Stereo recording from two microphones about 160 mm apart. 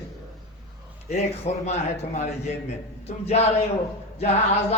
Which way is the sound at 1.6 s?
45° left (ahead or behind).